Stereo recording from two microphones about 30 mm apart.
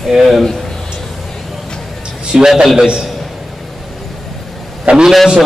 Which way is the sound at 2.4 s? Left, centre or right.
Centre.